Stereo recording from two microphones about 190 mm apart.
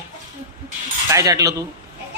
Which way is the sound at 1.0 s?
15° right (ahead or behind).